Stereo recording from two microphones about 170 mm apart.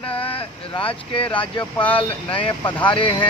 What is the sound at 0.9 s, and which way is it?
Speech, 30° left (ahead or behind).